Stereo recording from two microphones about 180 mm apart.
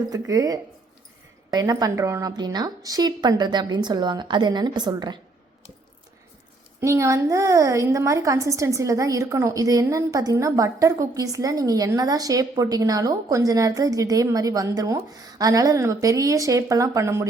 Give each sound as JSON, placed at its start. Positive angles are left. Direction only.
{"t": 0.1, "sound": "a woman's voice", "side_deg": -20}
{"t": 6.7, "sound": "a woman's voice", "side_deg": -15}